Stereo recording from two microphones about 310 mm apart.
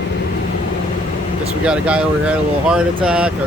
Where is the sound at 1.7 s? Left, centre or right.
Centre.